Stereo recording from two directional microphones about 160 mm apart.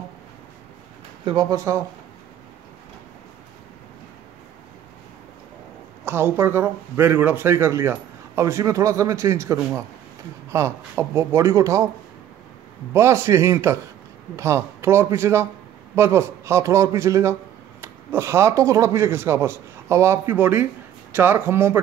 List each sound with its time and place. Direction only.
1.2 s speech: 25° right (ahead or behind)
6.0 s speech: 15° right (ahead or behind)
12.9 s speech: 15° right (ahead or behind)